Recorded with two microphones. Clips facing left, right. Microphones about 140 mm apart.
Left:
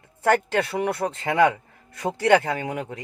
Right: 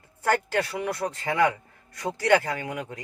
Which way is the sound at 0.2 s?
20° left (ahead or behind).